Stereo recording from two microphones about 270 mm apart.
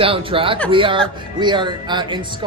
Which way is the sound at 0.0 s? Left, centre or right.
Centre.